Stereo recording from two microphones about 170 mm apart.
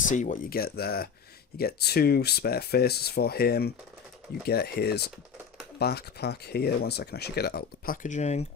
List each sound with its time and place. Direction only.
0.1 s speech: 50° left (ahead or behind); by 7.9 s 70° left (ahead or behind)
8.0 s speech: 45° left (ahead or behind)